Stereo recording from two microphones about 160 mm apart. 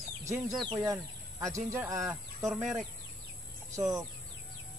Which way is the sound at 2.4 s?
Centre (ahead or behind).